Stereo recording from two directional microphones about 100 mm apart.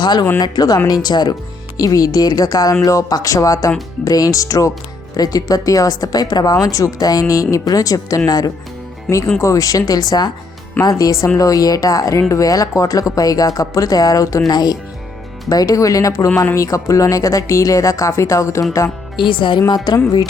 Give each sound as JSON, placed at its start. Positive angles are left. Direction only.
{"t": 0.0, "sound": "speech", "side_deg": 45}
{"t": 19.1, "sound": "speech", "side_deg": 55}